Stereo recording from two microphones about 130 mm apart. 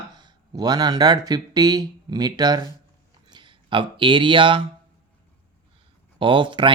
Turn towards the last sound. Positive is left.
turn(degrees=-40)  # may be behind; listen again after turning